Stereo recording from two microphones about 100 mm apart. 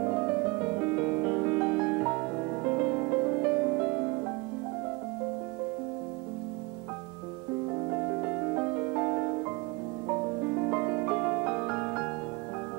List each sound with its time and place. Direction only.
0.0 s music: 15° right (ahead or behind)
7.9 s music: 15° right (ahead or behind)
10.6 s music: 15° right (ahead or behind)